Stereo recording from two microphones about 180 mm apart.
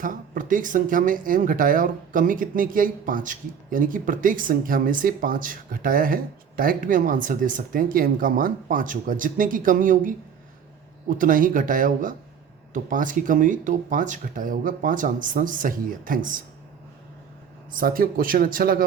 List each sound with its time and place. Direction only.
0.0 s speech: 50° right (ahead or behind)
17.7 s speech: 55° right (ahead or behind)